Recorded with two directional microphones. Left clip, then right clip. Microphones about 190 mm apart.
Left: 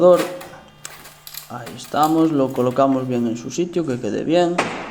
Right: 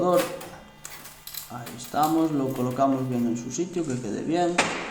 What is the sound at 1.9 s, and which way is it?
Speech, 45° left (ahead or behind).